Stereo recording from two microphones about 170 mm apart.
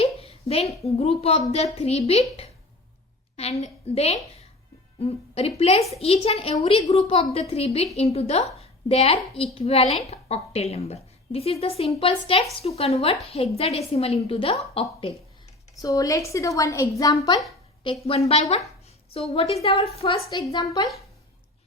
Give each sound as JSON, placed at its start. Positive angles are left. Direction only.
{"t": 0.0, "sound": "a sound", "side_deg": 35}
{"t": 0.9, "sound": "a woman's voice", "side_deg": 35}
{"t": 15.8, "sound": "a woman's voice", "side_deg": 20}
{"t": 18.0, "sound": "a woman's voice", "side_deg": 35}